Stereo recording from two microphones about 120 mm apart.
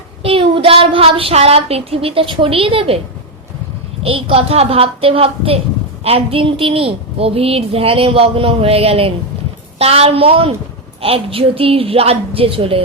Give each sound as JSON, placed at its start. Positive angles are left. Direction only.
{"t": 0.2, "sound": "a woman's voice", "side_deg": -50}
{"t": 4.0, "sound": "a woman's voice", "side_deg": -50}